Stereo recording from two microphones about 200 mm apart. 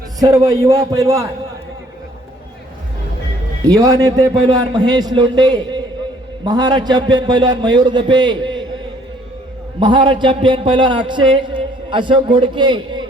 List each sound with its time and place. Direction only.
0.2 s a man's voice: 15° right (ahead or behind)
3.7 s a man's voice: 15° right (ahead or behind)
9.8 s a man's voice: 25° right (ahead or behind)